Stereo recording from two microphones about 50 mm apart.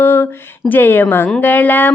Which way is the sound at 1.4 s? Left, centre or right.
Left.